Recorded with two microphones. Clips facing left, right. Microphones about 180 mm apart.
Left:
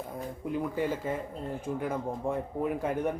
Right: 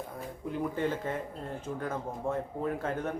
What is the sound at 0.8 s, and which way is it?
Speech, 10° left (ahead or behind).